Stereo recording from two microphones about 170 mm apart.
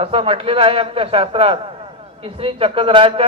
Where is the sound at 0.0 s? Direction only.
35° right (ahead or behind).